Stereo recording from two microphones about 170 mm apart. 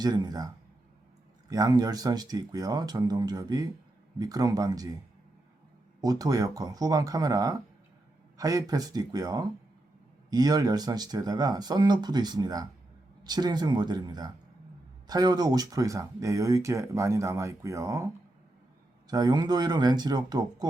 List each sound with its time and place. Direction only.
0.0 s speech: 25° right (ahead or behind)
6.0 s speech: 20° right (ahead or behind)
19.0 s speech: 25° right (ahead or behind)